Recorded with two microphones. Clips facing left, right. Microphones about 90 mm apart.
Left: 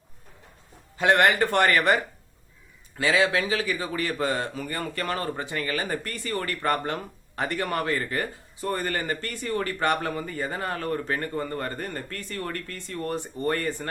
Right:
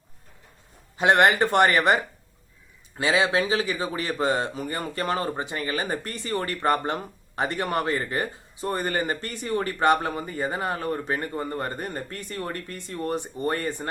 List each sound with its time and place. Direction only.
0.9 s speech: 20° right (ahead or behind)
3.0 s speech: 20° right (ahead or behind)